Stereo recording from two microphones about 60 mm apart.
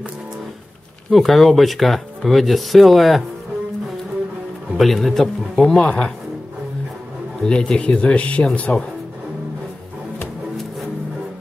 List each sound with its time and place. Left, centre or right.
1.1 s speech: centre
4.7 s speech: centre
5.8 s speech: centre
7.4 s speech: centre